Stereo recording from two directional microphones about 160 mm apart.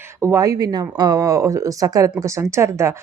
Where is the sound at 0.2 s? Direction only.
20° right (ahead or behind).